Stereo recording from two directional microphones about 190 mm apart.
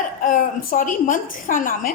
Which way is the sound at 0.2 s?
45° left (ahead or behind).